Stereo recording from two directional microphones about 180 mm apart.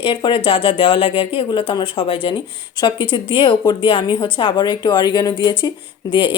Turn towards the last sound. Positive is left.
turn(degrees=25)  # may be behind; listen again after turning